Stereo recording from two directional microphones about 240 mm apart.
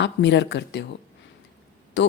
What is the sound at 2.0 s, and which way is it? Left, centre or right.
Speech, left.